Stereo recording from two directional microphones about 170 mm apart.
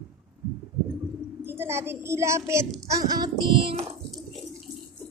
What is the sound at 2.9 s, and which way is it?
Child singing, 25° right (ahead or behind).